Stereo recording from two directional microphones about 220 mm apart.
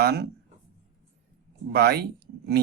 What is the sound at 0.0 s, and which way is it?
Speech, 45° right (ahead or behind).